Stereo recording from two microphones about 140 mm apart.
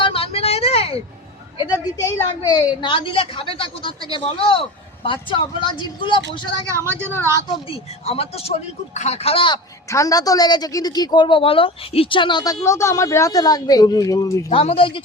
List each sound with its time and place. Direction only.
0.0 s vehicle: 40° left (ahead or behind)
1.5 s a sound: 30° left (ahead or behind)
2.6 s speech: 40° left (ahead or behind)
8.0 s speech: 45° left (ahead or behind)
9.9 s speech: 25° left (ahead or behind)
14.5 s speech: 40° left (ahead or behind)